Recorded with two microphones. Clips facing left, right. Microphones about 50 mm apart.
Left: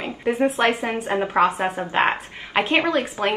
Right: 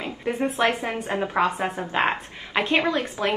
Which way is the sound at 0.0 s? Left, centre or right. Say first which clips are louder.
Left 5 dB; left.